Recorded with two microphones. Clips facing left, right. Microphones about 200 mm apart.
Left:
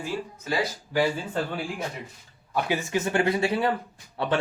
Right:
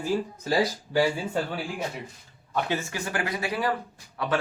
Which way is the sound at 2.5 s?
15° left (ahead or behind).